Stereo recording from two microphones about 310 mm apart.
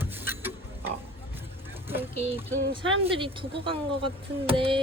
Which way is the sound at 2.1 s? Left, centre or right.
Centre.